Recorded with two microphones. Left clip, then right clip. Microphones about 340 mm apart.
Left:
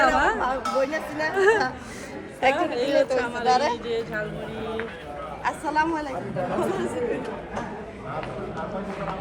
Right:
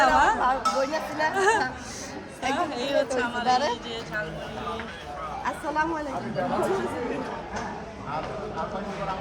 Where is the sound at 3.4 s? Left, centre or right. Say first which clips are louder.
Left 3 dB; left.